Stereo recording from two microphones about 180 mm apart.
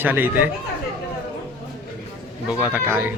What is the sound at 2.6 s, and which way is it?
Speech, 10° right (ahead or behind).